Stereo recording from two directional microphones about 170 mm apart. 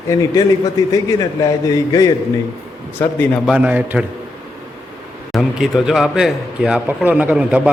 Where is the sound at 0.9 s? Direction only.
20° left (ahead or behind).